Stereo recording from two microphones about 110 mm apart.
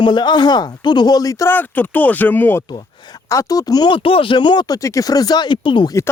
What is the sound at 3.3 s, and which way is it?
Speech, 30° left (ahead or behind).